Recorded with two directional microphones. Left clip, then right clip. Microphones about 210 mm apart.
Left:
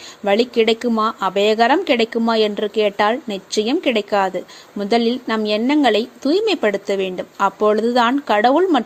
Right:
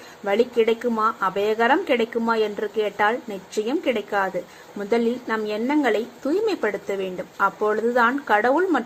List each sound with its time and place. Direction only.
0.3 s a woman's voice: 40° left (ahead or behind)